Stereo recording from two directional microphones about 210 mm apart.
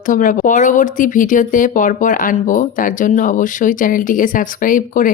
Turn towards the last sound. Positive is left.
turn(degrees=40)  # may be behind; listen again after turning